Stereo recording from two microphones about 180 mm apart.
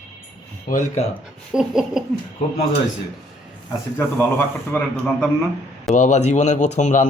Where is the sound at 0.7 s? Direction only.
45° left (ahead or behind).